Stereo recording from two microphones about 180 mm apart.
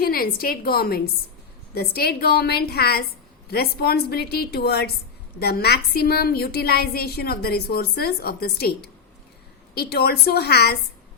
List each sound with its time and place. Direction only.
0.0 s a woman's voice: 55° left (ahead or behind)